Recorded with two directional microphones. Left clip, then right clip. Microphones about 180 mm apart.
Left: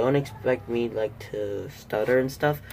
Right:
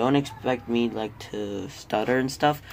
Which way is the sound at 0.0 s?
35° right (ahead or behind).